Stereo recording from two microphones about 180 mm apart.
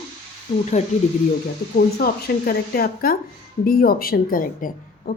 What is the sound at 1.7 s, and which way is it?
A woman's voice, 55° left (ahead or behind).